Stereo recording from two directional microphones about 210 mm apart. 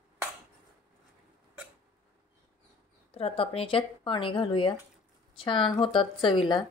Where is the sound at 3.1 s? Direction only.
25° left (ahead or behind).